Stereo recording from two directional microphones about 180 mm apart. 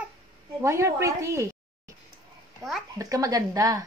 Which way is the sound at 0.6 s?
15° right (ahead or behind).